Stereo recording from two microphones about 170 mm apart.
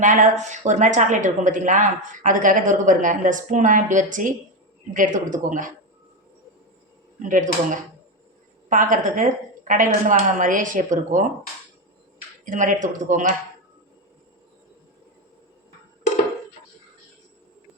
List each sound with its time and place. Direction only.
0.0 s a woman's voice: 50° right (ahead or behind)
7.2 s a woman's voice: 50° right (ahead or behind)
12.5 s a woman's voice: 50° right (ahead or behind)